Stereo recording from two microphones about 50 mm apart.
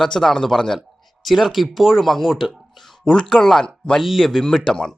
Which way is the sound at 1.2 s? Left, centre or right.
Centre.